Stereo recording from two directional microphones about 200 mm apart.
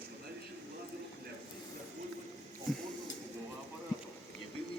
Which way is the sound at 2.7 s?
Centre (ahead or behind).